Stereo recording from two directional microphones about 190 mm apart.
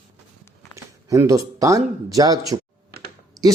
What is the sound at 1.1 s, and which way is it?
Speech, 15° right (ahead or behind).